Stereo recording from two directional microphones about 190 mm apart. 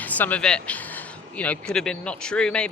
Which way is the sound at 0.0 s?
10° left (ahead or behind).